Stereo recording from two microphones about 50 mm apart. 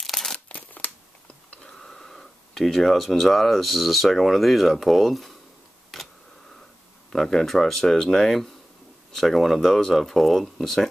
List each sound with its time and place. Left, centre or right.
0.0 s crumpling: centre
0.5 s crumpling: left
1.6 s speech: centre
5.9 s a sound: centre
7.1 s speech: centre